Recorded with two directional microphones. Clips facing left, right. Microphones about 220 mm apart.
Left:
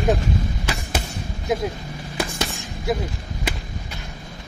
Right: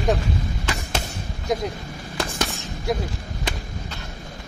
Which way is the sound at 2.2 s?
10° left (ahead or behind).